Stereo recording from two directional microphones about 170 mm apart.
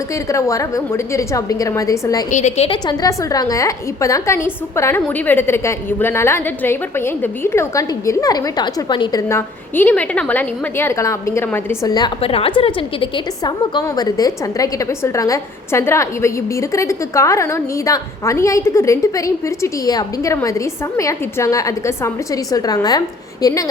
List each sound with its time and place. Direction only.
0.3 s a woman's voice: 20° left (ahead or behind)
2.3 s a woman's voice: 45° left (ahead or behind)
2.6 s a woman's voice: 25° left (ahead or behind)
9.3 s a woman's voice: 10° left (ahead or behind)